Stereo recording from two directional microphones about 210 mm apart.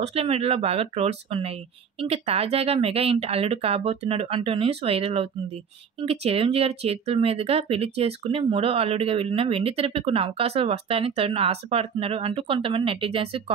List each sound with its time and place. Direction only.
0.0 s speech: 30° right (ahead or behind)